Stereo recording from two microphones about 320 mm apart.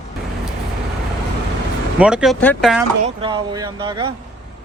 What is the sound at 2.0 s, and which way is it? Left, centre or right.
Speech, centre.